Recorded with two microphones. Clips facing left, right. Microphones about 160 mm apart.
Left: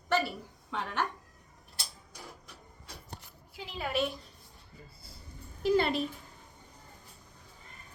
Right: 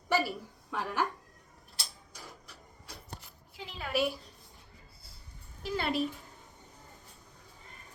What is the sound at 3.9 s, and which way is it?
Speech, 5° right (ahead or behind).